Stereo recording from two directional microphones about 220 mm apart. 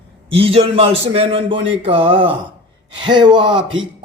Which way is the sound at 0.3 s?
25° right (ahead or behind).